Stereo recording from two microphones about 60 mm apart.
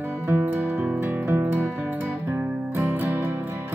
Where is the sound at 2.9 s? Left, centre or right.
Right.